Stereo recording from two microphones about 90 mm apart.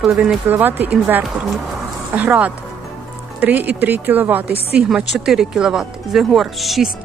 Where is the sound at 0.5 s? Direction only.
20° right (ahead or behind).